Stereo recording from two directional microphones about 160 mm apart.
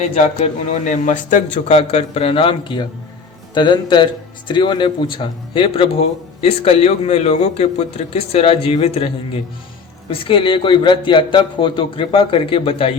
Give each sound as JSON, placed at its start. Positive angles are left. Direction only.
{"t": 0.1, "sound": "a man's voice", "side_deg": 40}